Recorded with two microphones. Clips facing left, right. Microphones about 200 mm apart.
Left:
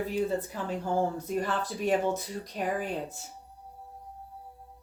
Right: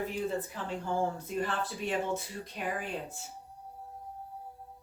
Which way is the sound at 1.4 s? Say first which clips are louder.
Left 2 dB; 40° left (ahead or behind).